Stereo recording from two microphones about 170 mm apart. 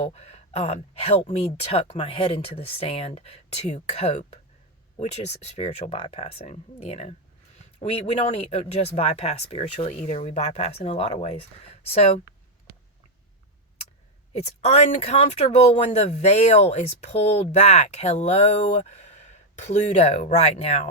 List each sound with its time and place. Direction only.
0.0 s speech: 40° left (ahead or behind)
9.9 s speech: 45° left (ahead or behind)
14.3 s speech: 40° left (ahead or behind)